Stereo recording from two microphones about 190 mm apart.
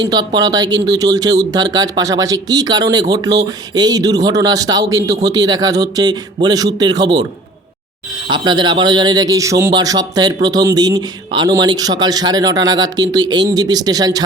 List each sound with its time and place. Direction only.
0.0 s speech: 20° right (ahead or behind)
8.3 s speech: 25° right (ahead or behind)